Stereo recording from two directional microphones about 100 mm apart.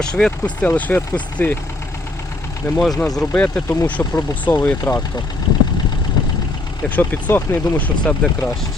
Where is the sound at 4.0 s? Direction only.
40° left (ahead or behind).